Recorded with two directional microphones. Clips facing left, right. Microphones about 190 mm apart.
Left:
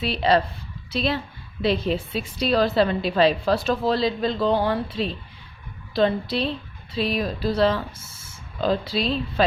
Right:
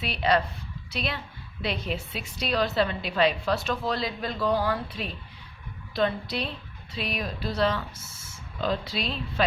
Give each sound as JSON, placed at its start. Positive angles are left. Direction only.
{"t": 0.0, "sound": "a woman's voice", "side_deg": 30}